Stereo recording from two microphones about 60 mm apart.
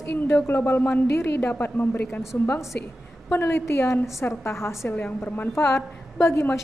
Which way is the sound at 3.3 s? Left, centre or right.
Left.